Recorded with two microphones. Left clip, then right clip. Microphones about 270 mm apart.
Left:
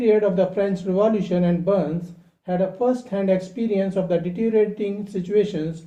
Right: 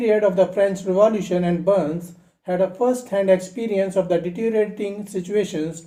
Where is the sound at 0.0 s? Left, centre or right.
Right.